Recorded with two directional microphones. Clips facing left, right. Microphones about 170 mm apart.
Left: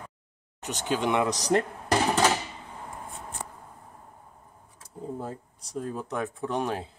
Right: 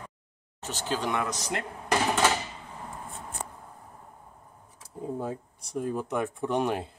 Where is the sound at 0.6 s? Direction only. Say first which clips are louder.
Left 3 dB; 15° left (ahead or behind).